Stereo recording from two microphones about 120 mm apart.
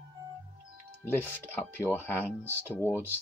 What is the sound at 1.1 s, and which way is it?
Speech, 15° left (ahead or behind).